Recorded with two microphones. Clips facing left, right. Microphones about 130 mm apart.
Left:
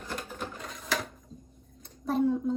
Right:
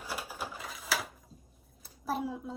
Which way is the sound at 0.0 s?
5° right (ahead or behind).